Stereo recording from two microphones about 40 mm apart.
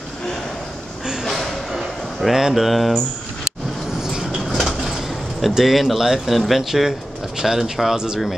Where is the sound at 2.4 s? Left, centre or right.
Centre.